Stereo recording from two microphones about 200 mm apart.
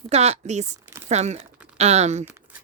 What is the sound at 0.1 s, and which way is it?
Speech, 35° right (ahead or behind).